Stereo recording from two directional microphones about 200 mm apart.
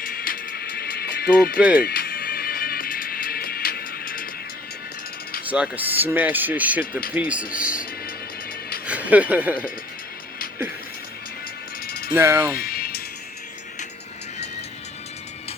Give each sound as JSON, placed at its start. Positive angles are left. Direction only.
{"t": 0.0, "sound": "music", "side_deg": 45}
{"t": 5.5, "sound": "speech", "side_deg": -5}
{"t": 8.9, "sound": "speech", "side_deg": -5}
{"t": 12.1, "sound": "speech", "side_deg": -10}
{"t": 12.5, "sound": "music", "side_deg": 50}